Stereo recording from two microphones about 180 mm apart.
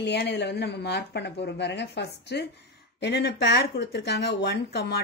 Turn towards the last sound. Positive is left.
turn(degrees=65)  # may be behind; listen again after turning